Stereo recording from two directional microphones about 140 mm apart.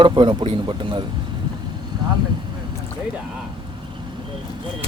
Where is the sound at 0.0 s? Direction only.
35° right (ahead or behind).